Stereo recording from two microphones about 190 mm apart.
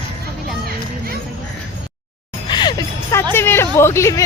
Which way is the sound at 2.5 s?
25° left (ahead or behind).